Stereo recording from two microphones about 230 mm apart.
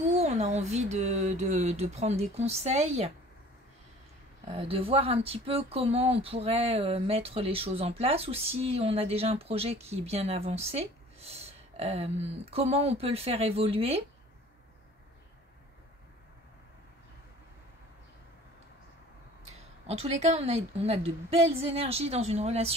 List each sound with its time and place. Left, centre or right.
0.1 s speech: right
4.5 s speech: right
19.9 s speech: right